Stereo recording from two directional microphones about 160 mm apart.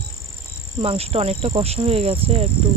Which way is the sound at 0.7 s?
40° right (ahead or behind).